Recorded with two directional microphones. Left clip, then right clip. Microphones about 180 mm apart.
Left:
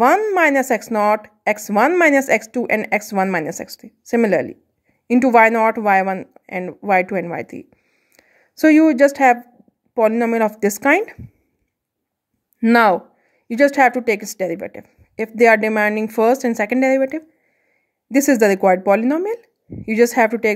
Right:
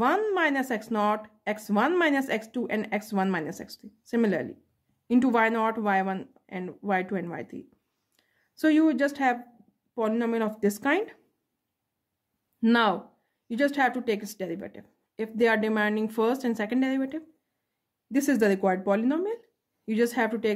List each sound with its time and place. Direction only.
0.0 s a woman's voice: 35° left (ahead or behind)
12.5 s a woman's voice: 35° left (ahead or behind)